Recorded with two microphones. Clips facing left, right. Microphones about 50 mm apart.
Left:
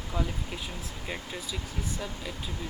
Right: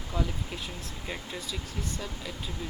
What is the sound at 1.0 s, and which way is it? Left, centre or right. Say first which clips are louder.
Speech: even; centre.